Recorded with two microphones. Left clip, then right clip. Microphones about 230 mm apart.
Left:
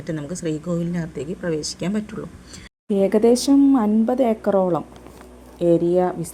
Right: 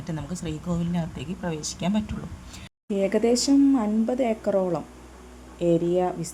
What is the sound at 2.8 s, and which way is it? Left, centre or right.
Speech, centre.